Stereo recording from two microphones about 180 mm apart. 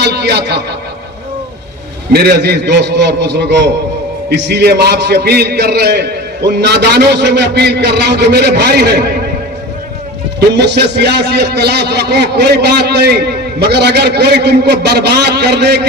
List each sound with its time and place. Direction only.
0.0 s a man's voice: 65° right (ahead or behind)
2.1 s a man's voice: 60° right (ahead or behind)
10.5 s a man's voice: 70° right (ahead or behind)